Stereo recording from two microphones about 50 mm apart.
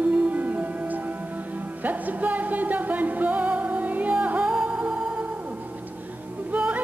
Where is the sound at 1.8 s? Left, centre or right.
Right; by 5.2 s centre.